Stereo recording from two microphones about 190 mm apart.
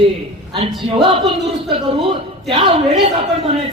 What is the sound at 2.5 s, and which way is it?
Speech, 30° right (ahead or behind).